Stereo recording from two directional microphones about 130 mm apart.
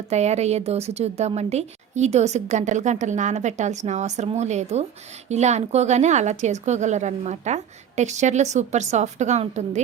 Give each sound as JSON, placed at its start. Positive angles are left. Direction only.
{"t": 0.1, "sound": "a woman's voice", "side_deg": -60}